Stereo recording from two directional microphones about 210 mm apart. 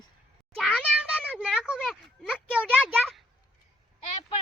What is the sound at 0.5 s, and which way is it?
A child's voice, 5° left (ahead or behind).